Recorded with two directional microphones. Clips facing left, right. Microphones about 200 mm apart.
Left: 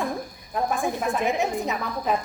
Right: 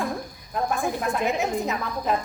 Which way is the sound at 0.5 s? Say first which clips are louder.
Even; centre (ahead or behind).